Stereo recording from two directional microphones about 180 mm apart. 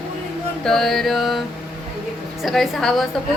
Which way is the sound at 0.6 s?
Centre (ahead or behind).